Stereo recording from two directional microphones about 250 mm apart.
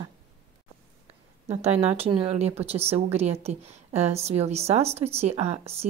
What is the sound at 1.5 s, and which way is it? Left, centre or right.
A woman's voice, right.